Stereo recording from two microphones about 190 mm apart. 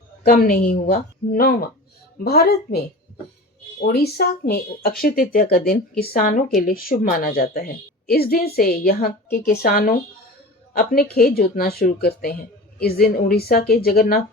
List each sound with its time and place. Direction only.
0.2 s a woman's voice: 50° left (ahead or behind)
3.8 s a woman's voice: 50° left (ahead or behind)